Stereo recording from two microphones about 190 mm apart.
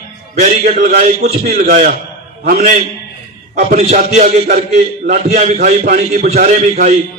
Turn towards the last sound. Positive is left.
turn(degrees=-45)  # may be behind; listen again after turning